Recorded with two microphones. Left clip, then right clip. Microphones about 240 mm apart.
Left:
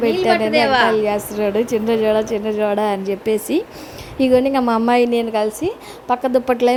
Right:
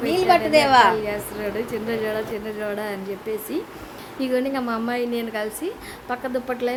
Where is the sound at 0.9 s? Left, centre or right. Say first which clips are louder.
Left 6 dB; left.